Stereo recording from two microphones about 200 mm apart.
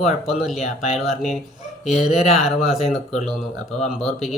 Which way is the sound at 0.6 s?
35° left (ahead or behind).